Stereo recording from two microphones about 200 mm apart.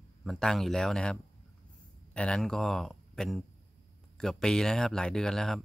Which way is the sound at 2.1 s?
5° left (ahead or behind).